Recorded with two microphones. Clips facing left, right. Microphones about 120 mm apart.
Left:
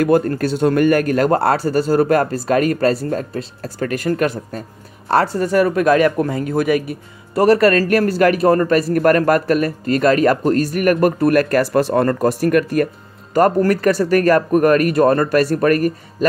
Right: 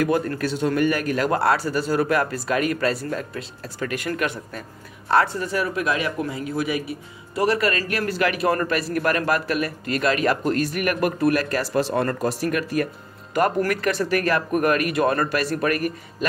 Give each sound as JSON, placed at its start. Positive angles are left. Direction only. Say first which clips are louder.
{"t": 0.0, "sound": "speech", "louder": "left 7 dB", "side_deg": 45}
{"t": 13.3, "sound": "speech", "louder": "left 7 dB", "side_deg": 35}